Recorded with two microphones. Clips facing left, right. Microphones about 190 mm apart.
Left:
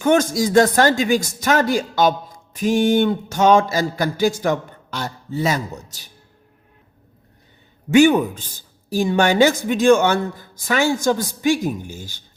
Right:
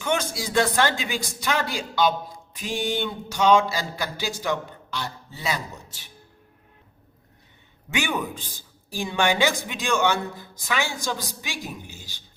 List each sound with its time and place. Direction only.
0.0 s speech: 45° left (ahead or behind)
7.9 s speech: 45° left (ahead or behind)